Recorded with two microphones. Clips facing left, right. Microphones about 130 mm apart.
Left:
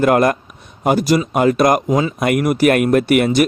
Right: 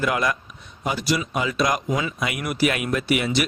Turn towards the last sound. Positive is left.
turn(degrees=50)  # may be behind; listen again after turning